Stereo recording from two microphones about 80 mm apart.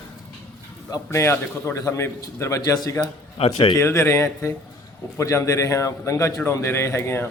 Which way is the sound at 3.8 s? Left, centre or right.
Left.